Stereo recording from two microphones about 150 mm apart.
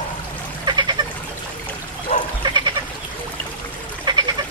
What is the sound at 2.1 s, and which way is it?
Goat, 50° left (ahead or behind).